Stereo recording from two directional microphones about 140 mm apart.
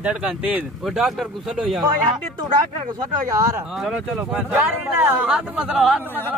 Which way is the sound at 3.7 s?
5° right (ahead or behind).